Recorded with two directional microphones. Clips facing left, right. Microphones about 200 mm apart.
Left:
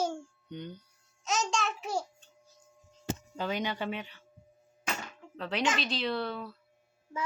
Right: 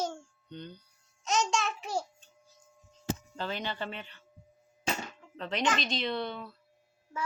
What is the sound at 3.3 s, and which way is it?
Speech, 10° left (ahead or behind).